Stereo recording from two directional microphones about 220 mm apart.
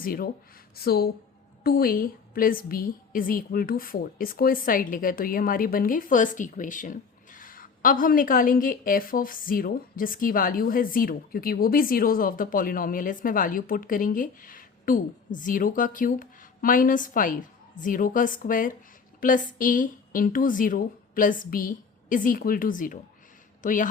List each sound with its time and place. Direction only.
0.0 s a woman's voice: 40° left (ahead or behind)